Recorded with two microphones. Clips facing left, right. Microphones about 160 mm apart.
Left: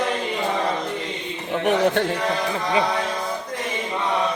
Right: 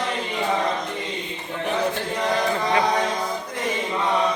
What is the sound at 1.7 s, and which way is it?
Speech, 70° left (ahead or behind).